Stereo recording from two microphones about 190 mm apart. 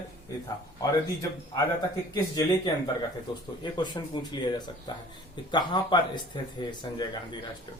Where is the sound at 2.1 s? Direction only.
20° left (ahead or behind).